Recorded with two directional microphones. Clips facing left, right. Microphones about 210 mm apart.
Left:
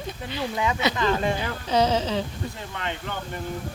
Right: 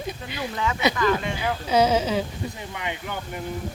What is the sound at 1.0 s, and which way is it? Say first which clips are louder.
Speech: even; 30° left (ahead or behind).